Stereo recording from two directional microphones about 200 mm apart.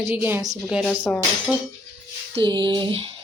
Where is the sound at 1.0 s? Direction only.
5° left (ahead or behind).